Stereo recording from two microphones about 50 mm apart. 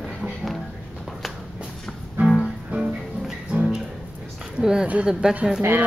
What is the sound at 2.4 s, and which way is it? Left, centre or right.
Music, centre.